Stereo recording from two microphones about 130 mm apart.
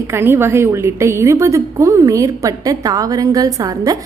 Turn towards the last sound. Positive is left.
turn(degrees=-30)  # may be behind; listen again after turning